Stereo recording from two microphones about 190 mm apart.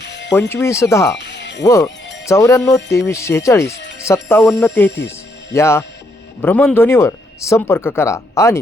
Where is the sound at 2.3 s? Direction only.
15° left (ahead or behind).